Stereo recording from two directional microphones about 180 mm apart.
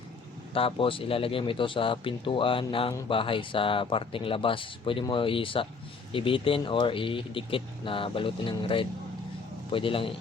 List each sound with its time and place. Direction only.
0.5 s speech: 30° left (ahead or behind)